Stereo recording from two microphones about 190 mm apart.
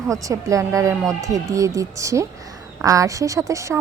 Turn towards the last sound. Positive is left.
turn(degrees=-15)  # may be behind; listen again after turning